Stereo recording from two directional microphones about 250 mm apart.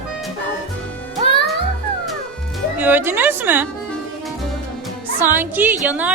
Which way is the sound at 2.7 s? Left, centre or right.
Centre.